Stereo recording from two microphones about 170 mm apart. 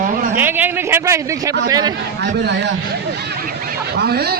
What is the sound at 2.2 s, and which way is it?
Speech, 85° right.